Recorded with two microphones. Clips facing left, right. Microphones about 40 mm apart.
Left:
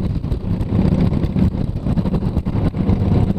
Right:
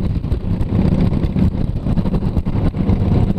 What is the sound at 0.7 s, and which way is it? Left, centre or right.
Vehicle, centre.